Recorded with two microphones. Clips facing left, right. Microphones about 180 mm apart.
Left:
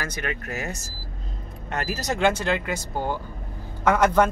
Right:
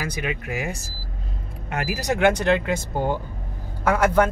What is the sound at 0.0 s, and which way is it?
Speech, 10° right (ahead or behind).